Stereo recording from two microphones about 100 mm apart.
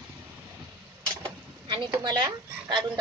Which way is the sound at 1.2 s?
50° right (ahead or behind).